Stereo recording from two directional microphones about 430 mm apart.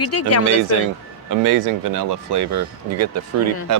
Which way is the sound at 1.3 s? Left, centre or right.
Right.